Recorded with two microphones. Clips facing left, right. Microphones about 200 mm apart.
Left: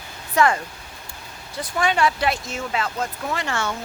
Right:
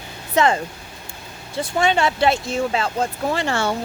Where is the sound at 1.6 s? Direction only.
25° right (ahead or behind).